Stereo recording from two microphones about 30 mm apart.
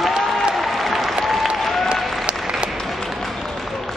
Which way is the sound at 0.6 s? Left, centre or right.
Centre.